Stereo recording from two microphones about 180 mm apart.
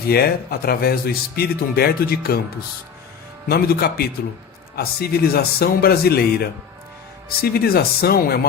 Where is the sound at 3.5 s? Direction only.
60° left (ahead or behind).